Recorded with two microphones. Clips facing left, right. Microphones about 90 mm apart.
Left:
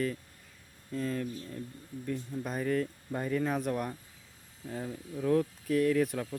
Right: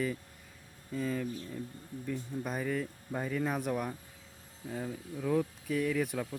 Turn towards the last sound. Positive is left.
turn(degrees=-5)  # may be behind; listen again after turning